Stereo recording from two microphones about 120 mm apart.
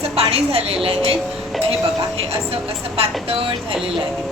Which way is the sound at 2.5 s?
55° right (ahead or behind).